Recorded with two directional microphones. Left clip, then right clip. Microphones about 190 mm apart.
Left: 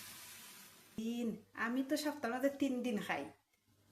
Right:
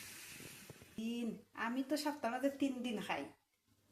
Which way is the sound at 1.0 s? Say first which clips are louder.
Left 2 dB; 30° left (ahead or behind).